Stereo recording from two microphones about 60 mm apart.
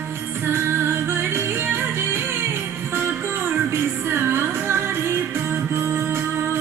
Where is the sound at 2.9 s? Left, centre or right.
Right.